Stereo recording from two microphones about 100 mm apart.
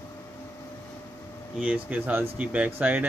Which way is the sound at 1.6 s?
15° right (ahead or behind).